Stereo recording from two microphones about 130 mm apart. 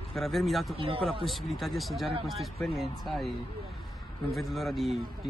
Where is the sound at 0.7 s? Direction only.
45° right (ahead or behind).